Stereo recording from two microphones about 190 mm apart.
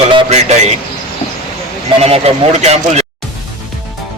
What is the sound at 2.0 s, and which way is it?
Speech, 35° right (ahead or behind).